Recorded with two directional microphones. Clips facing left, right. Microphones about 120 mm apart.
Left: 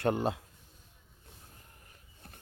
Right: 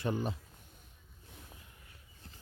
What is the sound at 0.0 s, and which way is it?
Speech, 70° left (ahead or behind).